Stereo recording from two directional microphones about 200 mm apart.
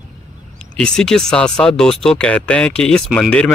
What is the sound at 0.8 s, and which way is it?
Speech, 5° left (ahead or behind).